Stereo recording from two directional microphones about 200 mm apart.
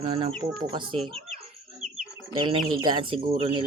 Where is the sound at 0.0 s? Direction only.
25° right (ahead or behind).